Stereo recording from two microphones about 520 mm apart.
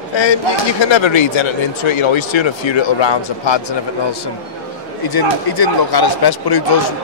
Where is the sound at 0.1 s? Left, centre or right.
Left.